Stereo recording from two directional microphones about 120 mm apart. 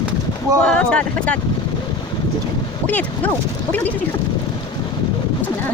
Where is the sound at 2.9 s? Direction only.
15° left (ahead or behind).